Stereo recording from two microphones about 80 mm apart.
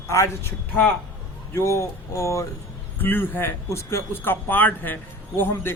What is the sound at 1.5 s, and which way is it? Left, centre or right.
Speech, left.